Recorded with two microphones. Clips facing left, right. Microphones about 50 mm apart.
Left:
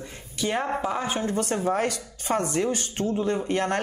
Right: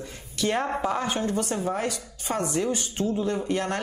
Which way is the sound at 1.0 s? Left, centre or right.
Left.